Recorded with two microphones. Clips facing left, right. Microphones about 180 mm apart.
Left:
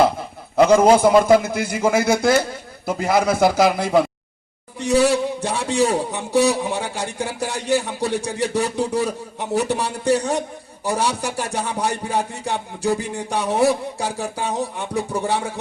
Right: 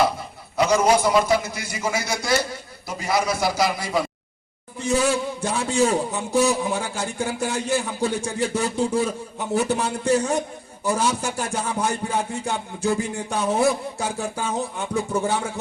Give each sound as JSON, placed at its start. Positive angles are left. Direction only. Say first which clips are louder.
{"t": 0.5, "sound": "a man's voice", "louder": "left 6 dB", "side_deg": 55}
{"t": 4.9, "sound": "a man's voice", "louder": "left 4 dB", "side_deg": 35}